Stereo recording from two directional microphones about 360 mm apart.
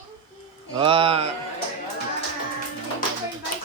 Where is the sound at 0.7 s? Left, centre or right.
Centre.